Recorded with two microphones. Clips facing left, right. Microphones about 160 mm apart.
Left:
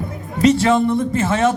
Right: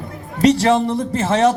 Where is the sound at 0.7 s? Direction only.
35° right (ahead or behind).